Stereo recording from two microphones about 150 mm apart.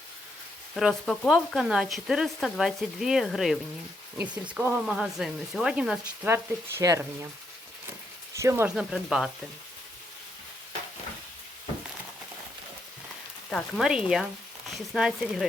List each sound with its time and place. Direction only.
0.7 s speech: centre (ahead or behind)
6.2 s speech: 15° right (ahead or behind)
8.4 s speech: 20° right (ahead or behind)
8.6 s speech: 5° right (ahead or behind)
13.5 s speech: 5° left (ahead or behind)